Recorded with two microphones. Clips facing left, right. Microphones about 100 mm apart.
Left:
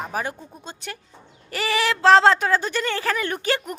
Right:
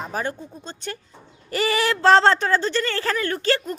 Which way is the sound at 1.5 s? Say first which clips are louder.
Right 2 dB; centre (ahead or behind).